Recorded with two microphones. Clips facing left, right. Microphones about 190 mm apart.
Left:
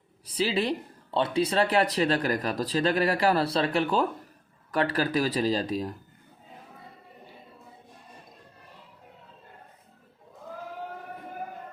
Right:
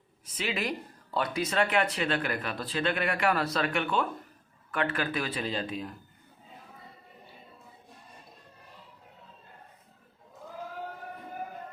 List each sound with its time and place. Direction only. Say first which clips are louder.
0.3 s speech: left 6 dB; 30° left (ahead or behind)